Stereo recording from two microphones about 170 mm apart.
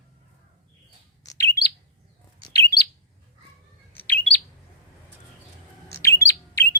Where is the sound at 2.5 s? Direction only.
20° left (ahead or behind).